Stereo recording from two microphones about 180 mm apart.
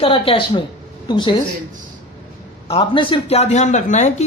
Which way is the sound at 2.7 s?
30° left (ahead or behind).